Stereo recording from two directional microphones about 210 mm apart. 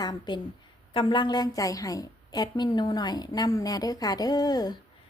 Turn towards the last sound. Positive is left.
turn(degrees=20)  # may be behind; listen again after turning